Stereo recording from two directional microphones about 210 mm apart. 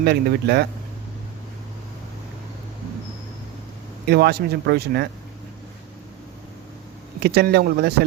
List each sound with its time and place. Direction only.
0.0 s speech: 50° right (ahead or behind)
4.0 s speech: 50° right (ahead or behind)
7.2 s speech: 50° right (ahead or behind)